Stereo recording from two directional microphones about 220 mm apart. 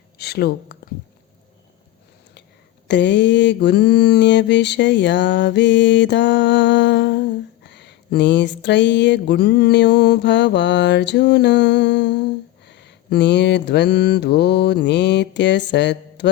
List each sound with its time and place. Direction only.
0.2 s a woman's voice: 45° left (ahead or behind)
2.8 s mantra: 55° left (ahead or behind)